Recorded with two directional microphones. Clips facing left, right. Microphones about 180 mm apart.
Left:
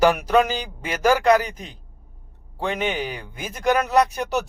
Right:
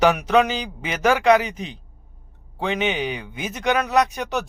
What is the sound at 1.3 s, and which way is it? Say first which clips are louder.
Speech: right 3 dB; 25° right (ahead or behind).